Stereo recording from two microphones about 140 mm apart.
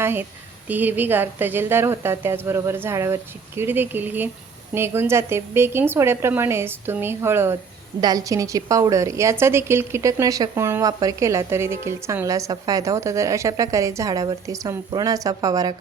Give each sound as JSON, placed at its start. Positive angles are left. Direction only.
{"t": 0.0, "sound": "a woman's voice", "side_deg": -15}